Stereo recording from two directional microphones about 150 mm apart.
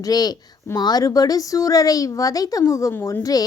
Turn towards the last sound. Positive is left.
turn(degrees=20)  # may be behind; listen again after turning